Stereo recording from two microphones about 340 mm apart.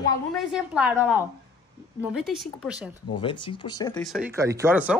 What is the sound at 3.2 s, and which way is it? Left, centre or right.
Speech, centre.